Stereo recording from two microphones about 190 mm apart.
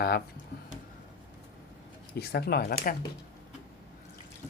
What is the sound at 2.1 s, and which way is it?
Speech, 60° left (ahead or behind).